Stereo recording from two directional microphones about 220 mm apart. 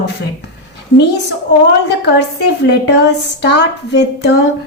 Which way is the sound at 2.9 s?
50° left (ahead or behind).